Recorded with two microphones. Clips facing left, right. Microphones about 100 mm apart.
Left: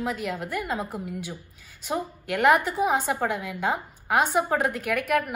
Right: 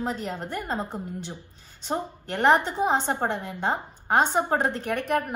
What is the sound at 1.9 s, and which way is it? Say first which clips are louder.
A woman's voice: left 1 dB; 35° right (ahead or behind).